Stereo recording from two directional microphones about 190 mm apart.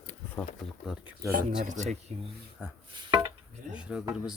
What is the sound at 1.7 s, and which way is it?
Speech, 40° right (ahead or behind).